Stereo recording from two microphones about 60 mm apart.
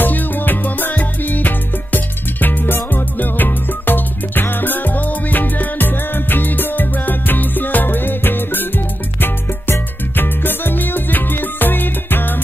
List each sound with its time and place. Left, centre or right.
0.0 s music: left